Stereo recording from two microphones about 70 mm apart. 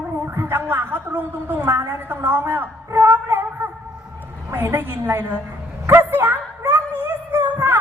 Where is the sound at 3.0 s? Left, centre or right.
Right.